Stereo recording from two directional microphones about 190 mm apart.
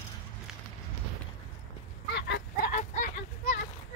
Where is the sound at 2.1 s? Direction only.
65° left (ahead or behind).